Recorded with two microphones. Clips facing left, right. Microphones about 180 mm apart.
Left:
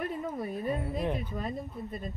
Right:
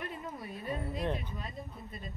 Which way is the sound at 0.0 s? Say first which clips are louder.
Left 8 dB; 50° left (ahead or behind).